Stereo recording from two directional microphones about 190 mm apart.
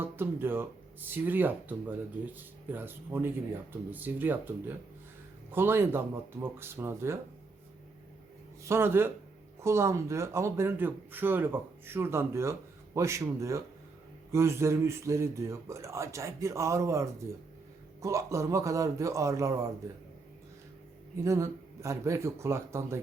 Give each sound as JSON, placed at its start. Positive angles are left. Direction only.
{"t": 0.0, "sound": "speech", "side_deg": -10}
{"t": 8.6, "sound": "speech", "side_deg": -15}
{"t": 21.2, "sound": "speech", "side_deg": -15}